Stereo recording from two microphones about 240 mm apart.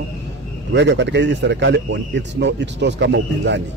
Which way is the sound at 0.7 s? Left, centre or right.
Right.